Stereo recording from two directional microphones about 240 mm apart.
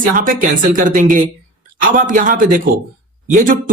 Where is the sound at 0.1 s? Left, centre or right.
Right.